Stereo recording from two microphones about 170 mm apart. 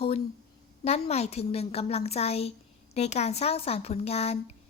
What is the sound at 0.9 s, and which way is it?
A woman's voice, 40° left (ahead or behind).